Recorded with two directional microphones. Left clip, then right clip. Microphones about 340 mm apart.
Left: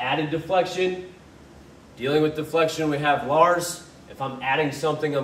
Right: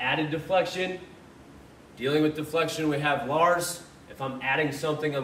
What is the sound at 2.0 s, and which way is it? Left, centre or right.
A man's voice, centre.